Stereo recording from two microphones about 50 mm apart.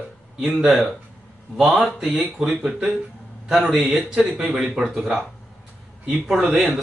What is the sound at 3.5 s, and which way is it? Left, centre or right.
A man's voice, centre.